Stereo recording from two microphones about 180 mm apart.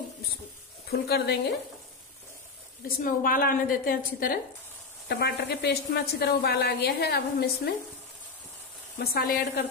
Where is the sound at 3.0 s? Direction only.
50° left (ahead or behind).